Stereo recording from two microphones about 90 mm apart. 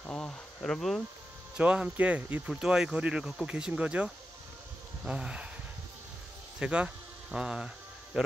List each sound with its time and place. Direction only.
0.0 s speech: 10° left (ahead or behind)
1.6 s speech: 15° right (ahead or behind)
2.5 s speech: 5° right (ahead or behind)
6.6 s a sound: 10° right (ahead or behind)